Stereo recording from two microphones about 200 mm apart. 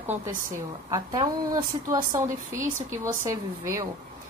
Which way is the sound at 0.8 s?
20° right (ahead or behind).